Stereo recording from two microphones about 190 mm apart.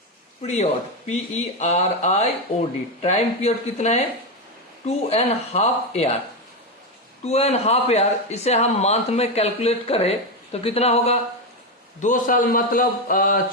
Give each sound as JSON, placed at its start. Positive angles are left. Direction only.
{"t": 0.4, "sound": "speech", "side_deg": 35}
{"t": 7.3, "sound": "speech", "side_deg": 35}
{"t": 12.0, "sound": "a man's voice", "side_deg": 45}